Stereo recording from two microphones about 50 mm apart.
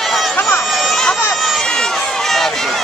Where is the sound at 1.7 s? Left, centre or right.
Centre.